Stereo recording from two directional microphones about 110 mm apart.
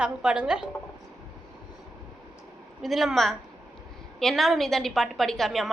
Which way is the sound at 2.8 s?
Centre (ahead or behind).